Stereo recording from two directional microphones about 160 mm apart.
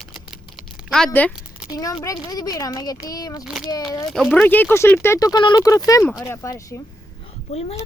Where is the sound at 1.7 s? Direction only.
25° left (ahead or behind).